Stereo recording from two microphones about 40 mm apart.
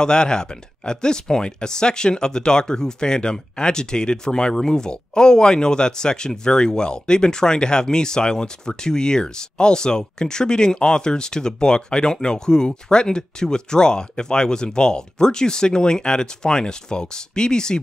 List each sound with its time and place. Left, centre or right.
0.0 s speech: centre